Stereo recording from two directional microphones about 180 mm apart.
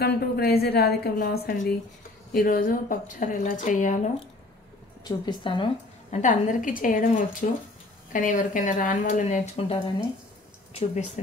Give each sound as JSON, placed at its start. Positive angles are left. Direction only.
{"t": 0.0, "sound": "a woman's voice", "side_deg": 60}
{"t": 5.0, "sound": "a woman's voice", "side_deg": 25}
{"t": 6.1, "sound": "speech", "side_deg": 45}